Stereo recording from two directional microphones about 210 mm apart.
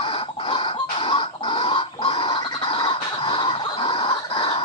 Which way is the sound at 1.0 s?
25° left (ahead or behind).